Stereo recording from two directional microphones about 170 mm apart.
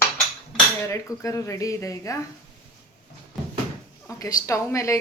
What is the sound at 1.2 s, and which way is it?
Speech, 20° left (ahead or behind).